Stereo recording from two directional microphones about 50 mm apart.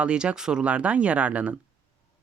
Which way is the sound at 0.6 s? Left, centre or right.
Right.